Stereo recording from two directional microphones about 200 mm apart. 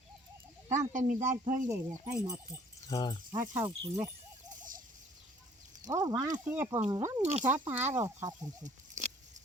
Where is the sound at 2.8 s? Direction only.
20° left (ahead or behind).